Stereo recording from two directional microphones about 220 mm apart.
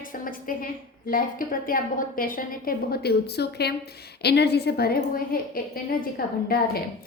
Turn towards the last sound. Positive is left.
turn(degrees=45)  # may be behind; listen again after turning